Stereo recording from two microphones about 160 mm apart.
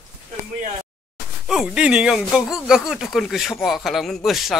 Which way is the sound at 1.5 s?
5° right (ahead or behind).